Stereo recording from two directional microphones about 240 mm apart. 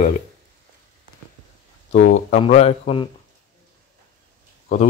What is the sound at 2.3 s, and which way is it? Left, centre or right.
Speech, left.